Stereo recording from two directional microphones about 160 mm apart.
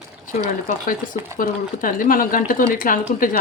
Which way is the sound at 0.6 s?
55° left (ahead or behind).